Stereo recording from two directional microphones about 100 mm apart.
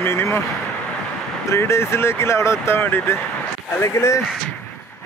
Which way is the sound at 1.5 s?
25° left (ahead or behind).